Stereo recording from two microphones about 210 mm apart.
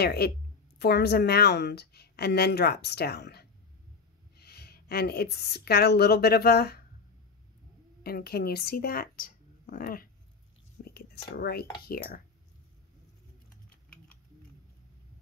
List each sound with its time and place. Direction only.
0.0 s a woman's voice: 50° left (ahead or behind)
8.0 s speech: 45° left (ahead or behind)
10.8 s whispering: 50° left (ahead or behind)
11.8 s a woman's voice: 45° left (ahead or behind)